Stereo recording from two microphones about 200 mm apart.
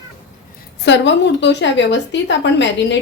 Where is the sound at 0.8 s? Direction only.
65° left (ahead or behind).